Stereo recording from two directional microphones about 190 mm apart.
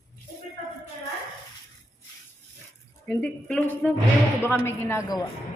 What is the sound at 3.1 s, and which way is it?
A woman's voice, 10° left (ahead or behind).